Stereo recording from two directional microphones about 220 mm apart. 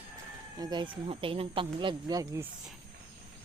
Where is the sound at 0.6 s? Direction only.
20° right (ahead or behind).